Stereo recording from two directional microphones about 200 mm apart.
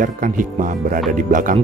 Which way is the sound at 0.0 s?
40° right (ahead or behind).